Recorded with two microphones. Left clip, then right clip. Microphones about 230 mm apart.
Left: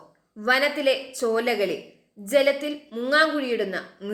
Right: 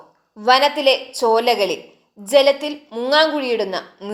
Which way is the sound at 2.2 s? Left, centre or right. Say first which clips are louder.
Right 4 dB; right.